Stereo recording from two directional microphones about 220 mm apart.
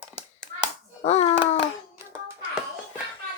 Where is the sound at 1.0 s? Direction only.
30° left (ahead or behind).